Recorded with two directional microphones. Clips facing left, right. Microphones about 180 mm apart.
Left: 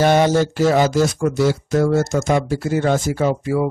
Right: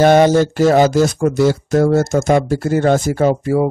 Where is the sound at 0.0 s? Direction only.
50° right (ahead or behind).